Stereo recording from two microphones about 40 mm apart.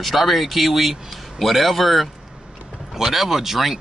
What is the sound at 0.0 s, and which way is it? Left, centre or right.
Speech, centre.